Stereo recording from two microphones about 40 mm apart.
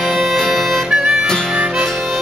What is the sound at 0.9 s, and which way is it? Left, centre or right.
Harmonica, centre.